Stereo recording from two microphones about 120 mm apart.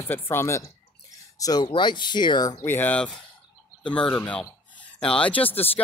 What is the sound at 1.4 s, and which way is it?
Speech, 30° left (ahead or behind).